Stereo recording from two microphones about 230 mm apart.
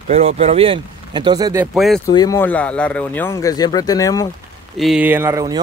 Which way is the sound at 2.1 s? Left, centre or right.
Centre.